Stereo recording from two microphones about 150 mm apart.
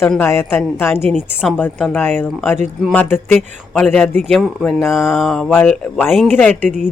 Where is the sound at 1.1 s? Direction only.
Centre (ahead or behind).